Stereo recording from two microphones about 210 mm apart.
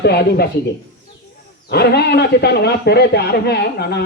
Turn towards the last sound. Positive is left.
turn(degrees=50)  # may be behind; listen again after turning